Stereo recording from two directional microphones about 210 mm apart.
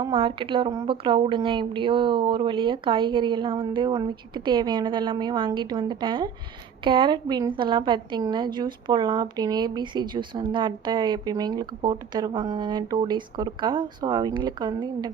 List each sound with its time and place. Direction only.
0.0 s a woman's voice: 25° right (ahead or behind)